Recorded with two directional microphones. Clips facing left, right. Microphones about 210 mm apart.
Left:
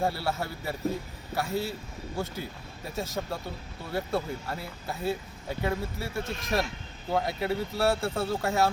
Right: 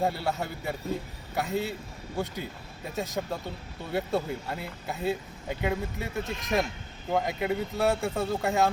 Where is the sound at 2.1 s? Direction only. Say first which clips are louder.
Right 2 dB; centre (ahead or behind).